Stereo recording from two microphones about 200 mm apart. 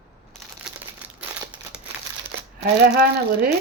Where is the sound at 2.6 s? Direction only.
55° right (ahead or behind).